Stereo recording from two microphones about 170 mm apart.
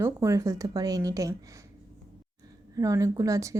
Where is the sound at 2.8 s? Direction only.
20° right (ahead or behind).